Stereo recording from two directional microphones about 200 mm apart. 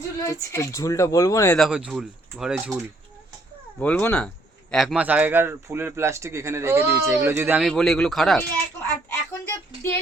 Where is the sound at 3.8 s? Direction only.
10° left (ahead or behind); by 7.6 s 10° right (ahead or behind).